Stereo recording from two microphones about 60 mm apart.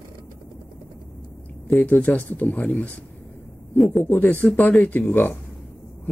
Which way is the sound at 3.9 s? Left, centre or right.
Left.